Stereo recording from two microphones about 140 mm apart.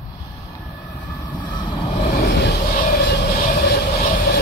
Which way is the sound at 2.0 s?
80° left.